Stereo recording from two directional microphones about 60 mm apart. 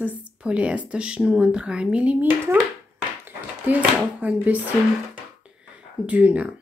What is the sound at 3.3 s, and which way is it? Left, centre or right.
Speech, right.